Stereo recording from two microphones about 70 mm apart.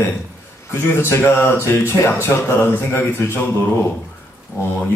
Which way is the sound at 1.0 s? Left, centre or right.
Left.